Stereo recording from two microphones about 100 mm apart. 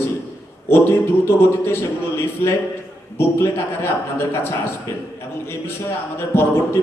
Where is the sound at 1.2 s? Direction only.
25° left (ahead or behind).